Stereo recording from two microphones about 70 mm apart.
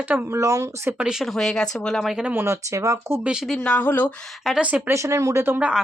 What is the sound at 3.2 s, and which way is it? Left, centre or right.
Speech, centre.